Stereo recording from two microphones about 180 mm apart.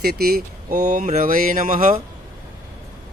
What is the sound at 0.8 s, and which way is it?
Speech, 45° right (ahead or behind).